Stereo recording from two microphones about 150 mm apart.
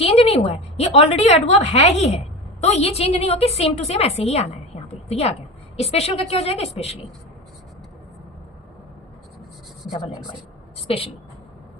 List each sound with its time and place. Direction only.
0.0 s a woman's voice: 40° left (ahead or behind)
10.8 s a woman's voice: 40° left (ahead or behind)